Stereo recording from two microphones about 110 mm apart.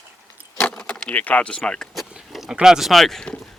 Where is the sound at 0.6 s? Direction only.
10° left (ahead or behind).